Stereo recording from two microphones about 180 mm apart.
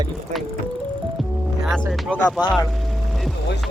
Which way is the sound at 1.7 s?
5° left (ahead or behind).